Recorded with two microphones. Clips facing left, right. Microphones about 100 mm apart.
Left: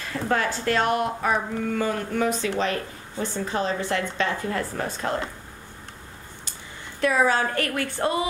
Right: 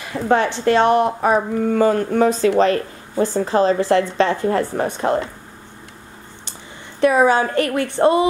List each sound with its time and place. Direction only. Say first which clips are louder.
0.0 s speech: right 7 dB; 20° right (ahead or behind)
4.9 s a woman's voice: right 9 dB; 20° right (ahead or behind)
7.0 s a woman's voice: right 7 dB; 20° right (ahead or behind)